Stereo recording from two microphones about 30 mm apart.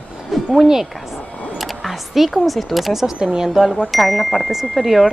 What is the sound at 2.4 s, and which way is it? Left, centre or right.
Speech, centre.